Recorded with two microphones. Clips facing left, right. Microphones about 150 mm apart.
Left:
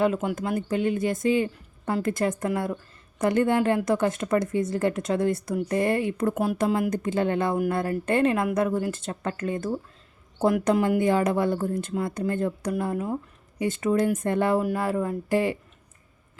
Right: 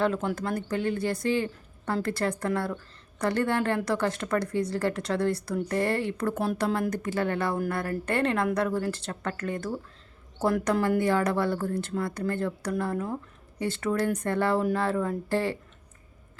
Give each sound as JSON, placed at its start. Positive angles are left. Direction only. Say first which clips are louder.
{"t": 0.0, "sound": "a woman's voice", "louder": "left 3 dB", "side_deg": 10}